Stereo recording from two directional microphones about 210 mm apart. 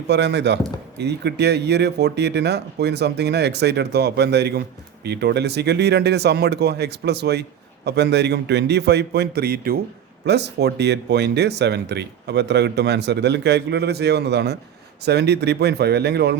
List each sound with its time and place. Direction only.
0.1 s speech: 55° right (ahead or behind)